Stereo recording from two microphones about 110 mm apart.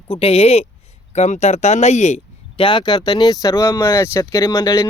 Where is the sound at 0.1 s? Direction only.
60° left (ahead or behind).